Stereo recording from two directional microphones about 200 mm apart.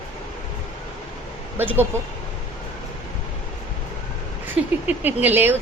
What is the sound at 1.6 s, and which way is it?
Speech, 10° right (ahead or behind).